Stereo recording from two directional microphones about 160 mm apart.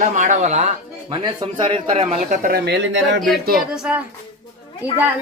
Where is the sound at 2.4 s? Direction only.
80° right.